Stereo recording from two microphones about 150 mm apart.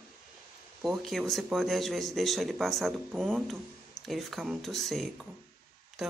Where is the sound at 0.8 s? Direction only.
Centre (ahead or behind).